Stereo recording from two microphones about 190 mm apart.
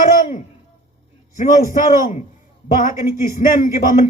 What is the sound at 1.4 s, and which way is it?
Speech, 40° left (ahead or behind).